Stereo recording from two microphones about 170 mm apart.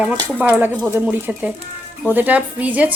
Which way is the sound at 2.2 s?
10° right (ahead or behind).